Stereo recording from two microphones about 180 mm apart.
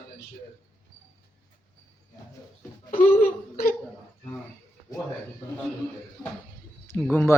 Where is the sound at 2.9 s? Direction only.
45° left (ahead or behind).